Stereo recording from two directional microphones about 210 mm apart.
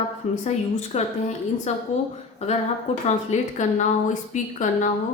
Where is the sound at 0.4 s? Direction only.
30° left (ahead or behind).